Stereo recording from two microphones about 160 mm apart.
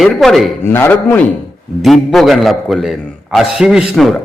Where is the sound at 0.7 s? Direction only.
15° left (ahead or behind).